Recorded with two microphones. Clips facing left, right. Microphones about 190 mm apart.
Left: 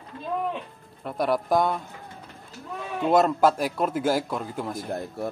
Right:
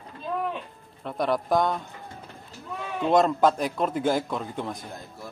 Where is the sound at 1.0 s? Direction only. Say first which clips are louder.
Left 1 dB; 5° left (ahead or behind).